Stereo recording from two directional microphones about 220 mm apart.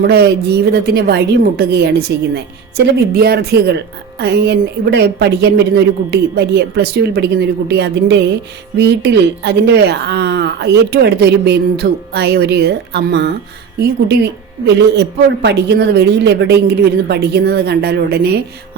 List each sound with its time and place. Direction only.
0.1 s a woman's voice: 45° right (ahead or behind)